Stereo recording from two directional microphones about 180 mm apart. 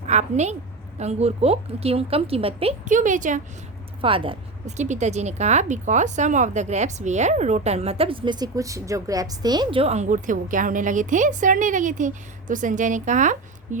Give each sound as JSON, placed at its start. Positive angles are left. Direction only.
{"t": 0.0, "sound": "a woman's voice", "side_deg": -40}
{"t": 2.9, "sound": "a woman's voice", "side_deg": -45}
{"t": 4.0, "sound": "speech", "side_deg": -30}
{"t": 4.8, "sound": "a woman's voice", "side_deg": -40}